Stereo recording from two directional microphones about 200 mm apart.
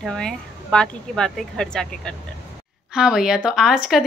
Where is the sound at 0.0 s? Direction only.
5° left (ahead or behind).